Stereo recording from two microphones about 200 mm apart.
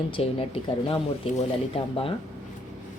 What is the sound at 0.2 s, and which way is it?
Speech, 30° left (ahead or behind).